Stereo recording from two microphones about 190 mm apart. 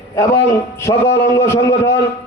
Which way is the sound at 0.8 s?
15° left (ahead or behind).